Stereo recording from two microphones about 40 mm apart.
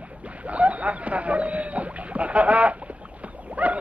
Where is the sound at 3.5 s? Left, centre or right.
Right.